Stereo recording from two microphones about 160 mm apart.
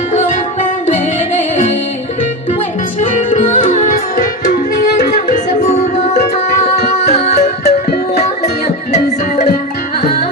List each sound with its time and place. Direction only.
1.4 s music: 45° left (ahead or behind)
3.2 s music: 50° left (ahead or behind)